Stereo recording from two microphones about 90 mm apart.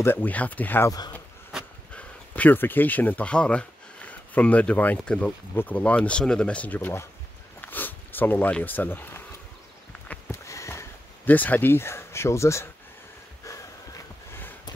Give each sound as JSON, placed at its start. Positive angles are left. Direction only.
{"t": 0.0, "sound": "speech", "side_deg": 20}
{"t": 0.8, "sound": "speech", "side_deg": 45}
{"t": 1.5, "sound": "a sound", "side_deg": -5}
{"t": 2.0, "sound": "speech", "side_deg": 15}
{"t": 10.3, "sound": "a sound", "side_deg": 35}
{"t": 11.2, "sound": "speech", "side_deg": 20}